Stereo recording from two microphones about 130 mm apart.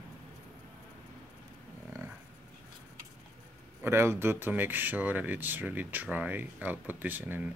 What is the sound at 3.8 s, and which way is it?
Speech, 20° right (ahead or behind).